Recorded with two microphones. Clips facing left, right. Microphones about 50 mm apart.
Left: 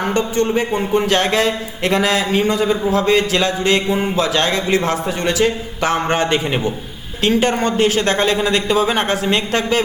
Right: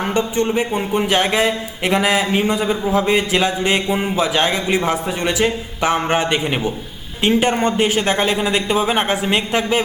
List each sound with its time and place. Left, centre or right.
0.0 s a man's voice: centre
7.2 s speech: centre